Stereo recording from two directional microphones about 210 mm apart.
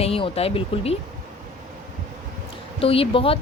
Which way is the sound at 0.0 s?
30° left (ahead or behind).